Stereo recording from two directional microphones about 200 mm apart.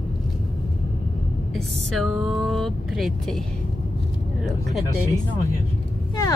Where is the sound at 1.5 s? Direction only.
Centre (ahead or behind).